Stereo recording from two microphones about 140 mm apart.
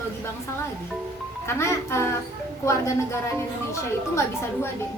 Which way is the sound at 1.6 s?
20° left (ahead or behind).